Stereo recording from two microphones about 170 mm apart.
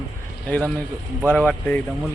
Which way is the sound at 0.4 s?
10° left (ahead or behind).